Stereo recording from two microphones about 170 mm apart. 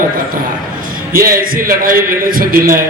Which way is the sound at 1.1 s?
60° right (ahead or behind).